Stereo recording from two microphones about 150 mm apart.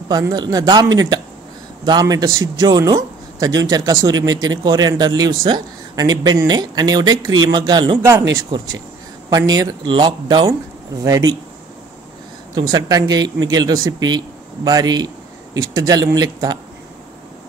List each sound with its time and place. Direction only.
0.1 s speech: 25° right (ahead or behind)
8.0 s speech: 20° right (ahead or behind)
12.5 s speech: 25° right (ahead or behind)